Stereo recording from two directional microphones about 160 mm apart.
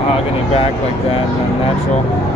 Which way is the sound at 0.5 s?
35° left (ahead or behind).